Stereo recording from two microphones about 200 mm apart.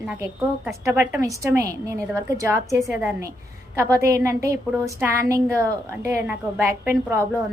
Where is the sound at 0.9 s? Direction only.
15° right (ahead or behind).